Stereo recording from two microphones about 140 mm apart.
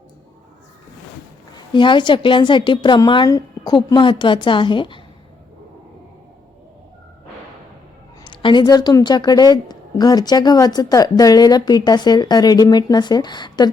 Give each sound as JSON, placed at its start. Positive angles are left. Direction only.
{"t": 1.5, "sound": "a woman's voice", "side_deg": 35}
{"t": 8.3, "sound": "a woman's voice", "side_deg": 35}